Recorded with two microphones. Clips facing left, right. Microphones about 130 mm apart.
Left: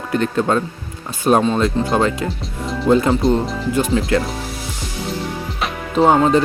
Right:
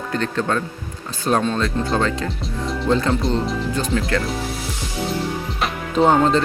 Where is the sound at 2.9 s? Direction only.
15° left (ahead or behind).